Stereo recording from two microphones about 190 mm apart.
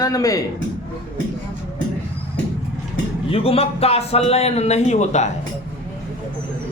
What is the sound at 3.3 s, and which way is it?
A man's voice, 30° left (ahead or behind).